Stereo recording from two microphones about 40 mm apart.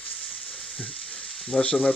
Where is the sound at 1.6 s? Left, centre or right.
Left.